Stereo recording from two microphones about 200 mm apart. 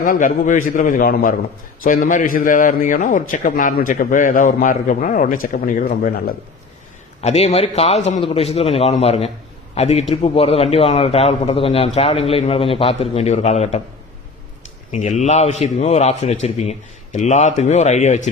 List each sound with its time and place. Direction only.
0.0 s a man's voice: 40° left (ahead or behind)
7.2 s a man's voice: 35° left (ahead or behind)
14.9 s a man's voice: 35° left (ahead or behind)